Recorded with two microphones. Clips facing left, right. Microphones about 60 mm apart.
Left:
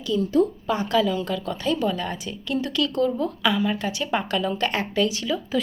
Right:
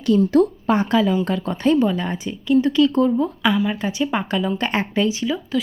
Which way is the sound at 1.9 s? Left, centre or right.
Right.